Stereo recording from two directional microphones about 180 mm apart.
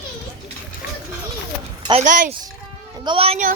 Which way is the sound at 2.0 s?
45° right (ahead or behind).